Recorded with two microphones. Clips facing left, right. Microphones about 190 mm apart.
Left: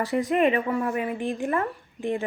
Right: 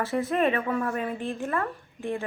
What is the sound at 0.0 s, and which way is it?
A woman's voice, 15° left (ahead or behind).